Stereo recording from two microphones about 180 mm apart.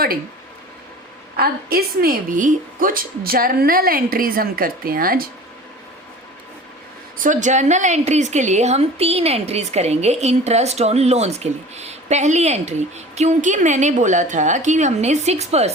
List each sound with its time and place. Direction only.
1.4 s a woman's voice: 55° right (ahead or behind)
7.2 s a woman's voice: 45° right (ahead or behind)